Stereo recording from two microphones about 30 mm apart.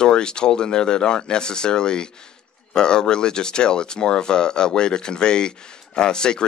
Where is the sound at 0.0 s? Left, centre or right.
Left.